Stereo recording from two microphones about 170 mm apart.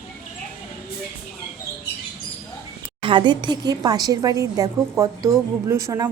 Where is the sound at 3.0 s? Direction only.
30° right (ahead or behind).